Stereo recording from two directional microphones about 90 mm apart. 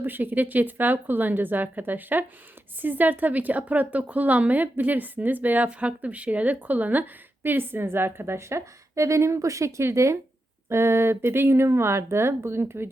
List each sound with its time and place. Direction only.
0.0 s a woman's voice: 20° right (ahead or behind)